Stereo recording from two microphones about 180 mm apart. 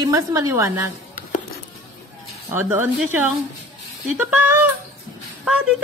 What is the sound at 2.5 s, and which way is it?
A woman's voice, 10° right (ahead or behind).